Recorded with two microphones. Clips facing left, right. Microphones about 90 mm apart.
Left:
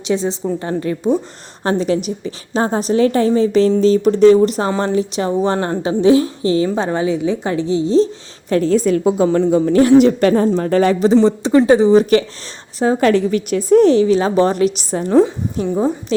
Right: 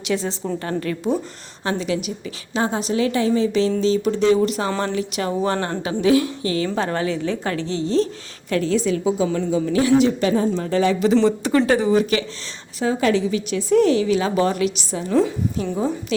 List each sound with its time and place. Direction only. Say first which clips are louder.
0.1 s a woman's voice: left 5 dB; 20° left (ahead or behind)
1.6 s a woman's voice: left 6 dB; 40° left (ahead or behind); by 8.1 s 20° left (ahead or behind)
8.4 s a woman's voice: left 6 dB; 35° left (ahead or behind)
11.2 s a woman's voice: left 5 dB; 25° left (ahead or behind)
12.8 s a woman's voice: left 6 dB; 35° left (ahead or behind)
13.1 s a woman's voice: left 5 dB; 50° left (ahead or behind)
15.6 s a woman's voice: left 9 dB; 30° left (ahead or behind)